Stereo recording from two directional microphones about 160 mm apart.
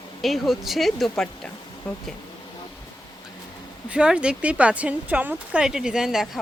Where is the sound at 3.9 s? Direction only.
5° right (ahead or behind).